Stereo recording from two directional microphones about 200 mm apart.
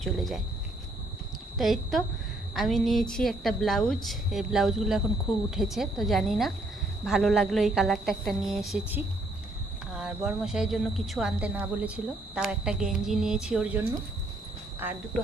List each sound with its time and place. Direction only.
0.0 s a woman's voice: centre (ahead or behind)
1.5 s a woman's voice: centre (ahead or behind)